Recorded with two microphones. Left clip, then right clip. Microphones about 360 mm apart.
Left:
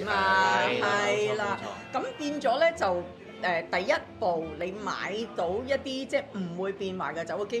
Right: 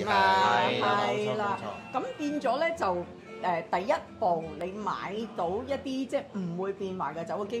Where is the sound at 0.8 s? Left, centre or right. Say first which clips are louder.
Left 1 dB; centre.